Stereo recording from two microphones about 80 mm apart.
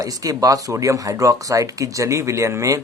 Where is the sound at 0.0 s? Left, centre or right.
Right.